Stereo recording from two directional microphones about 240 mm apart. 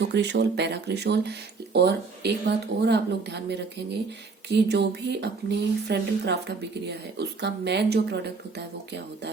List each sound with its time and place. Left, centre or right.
0.0 s speech: right